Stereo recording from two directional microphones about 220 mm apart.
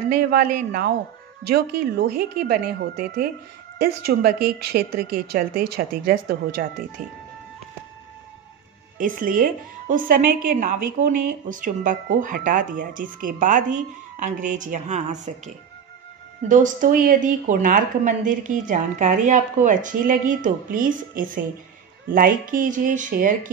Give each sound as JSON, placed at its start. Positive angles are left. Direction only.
{"t": 0.1, "sound": "a woman's voice", "side_deg": -45}
{"t": 8.9, "sound": "a woman's voice", "side_deg": -40}